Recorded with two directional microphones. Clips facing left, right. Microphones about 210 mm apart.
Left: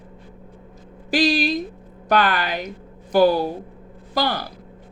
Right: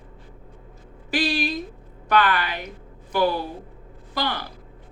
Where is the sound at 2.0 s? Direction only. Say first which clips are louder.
Left 2 dB; 40° left (ahead or behind).